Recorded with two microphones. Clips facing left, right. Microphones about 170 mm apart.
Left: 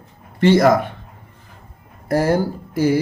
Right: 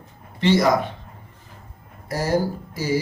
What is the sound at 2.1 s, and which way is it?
Speech, 60° left (ahead or behind).